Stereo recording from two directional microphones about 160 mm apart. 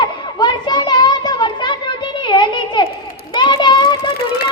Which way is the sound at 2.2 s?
30° left (ahead or behind).